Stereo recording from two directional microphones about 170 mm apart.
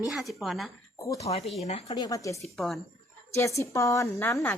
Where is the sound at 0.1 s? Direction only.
Centre (ahead or behind).